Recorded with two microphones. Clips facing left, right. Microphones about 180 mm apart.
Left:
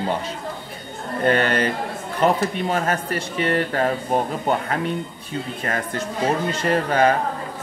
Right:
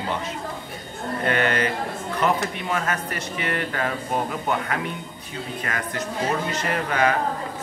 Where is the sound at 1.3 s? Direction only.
35° left (ahead or behind).